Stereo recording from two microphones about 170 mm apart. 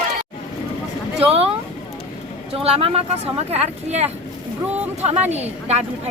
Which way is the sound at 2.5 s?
35° right (ahead or behind).